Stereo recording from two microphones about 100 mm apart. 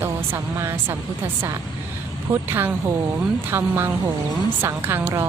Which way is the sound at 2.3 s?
20° right (ahead or behind).